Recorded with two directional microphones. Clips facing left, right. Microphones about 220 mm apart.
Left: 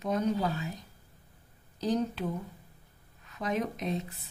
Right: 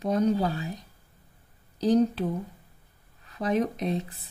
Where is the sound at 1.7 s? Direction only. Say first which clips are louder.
Right 8 dB; 35° right (ahead or behind).